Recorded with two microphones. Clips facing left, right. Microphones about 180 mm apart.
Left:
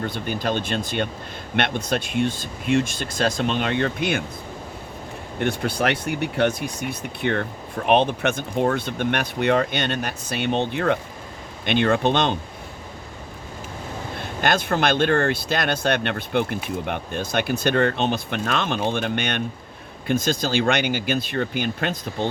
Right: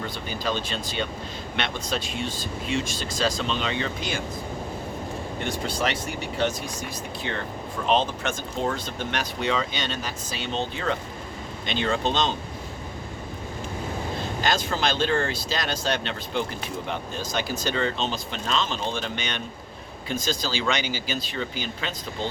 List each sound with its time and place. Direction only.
0.0 s speech: 55° left (ahead or behind)
5.4 s speech: 60° left (ahead or behind)
14.2 s speech: 60° left (ahead or behind)